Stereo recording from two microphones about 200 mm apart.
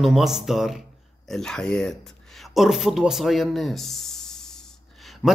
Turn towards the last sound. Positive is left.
turn(degrees=0)  # may be behind; listen again after turning